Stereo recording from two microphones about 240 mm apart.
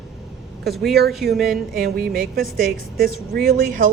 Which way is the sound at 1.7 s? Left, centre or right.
Right.